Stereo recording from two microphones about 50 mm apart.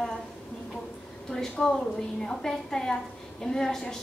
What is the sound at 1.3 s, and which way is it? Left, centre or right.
A woman's voice, centre.